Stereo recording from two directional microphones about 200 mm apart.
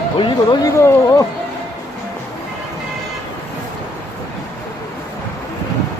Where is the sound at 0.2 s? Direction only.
25° left (ahead or behind).